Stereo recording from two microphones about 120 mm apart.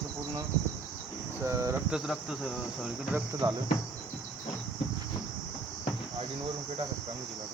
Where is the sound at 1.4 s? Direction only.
25° right (ahead or behind).